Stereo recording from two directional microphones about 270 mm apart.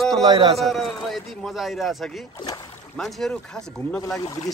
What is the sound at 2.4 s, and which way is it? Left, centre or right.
Rowboat, centre.